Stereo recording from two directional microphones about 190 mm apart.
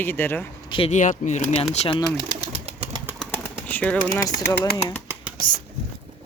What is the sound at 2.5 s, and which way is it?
Pigeon, 30° right (ahead or behind).